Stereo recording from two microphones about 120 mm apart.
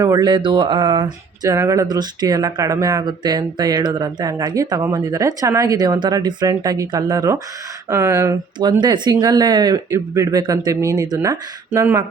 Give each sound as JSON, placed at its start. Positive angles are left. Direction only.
{"t": 0.0, "sound": "speech", "side_deg": -35}
{"t": 8.5, "sound": "speech", "side_deg": -40}